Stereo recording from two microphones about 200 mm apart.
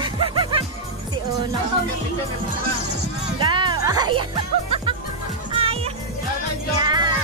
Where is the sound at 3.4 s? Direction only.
25° right (ahead or behind).